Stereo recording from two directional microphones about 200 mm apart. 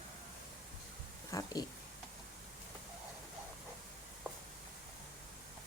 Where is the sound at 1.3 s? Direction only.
15° left (ahead or behind).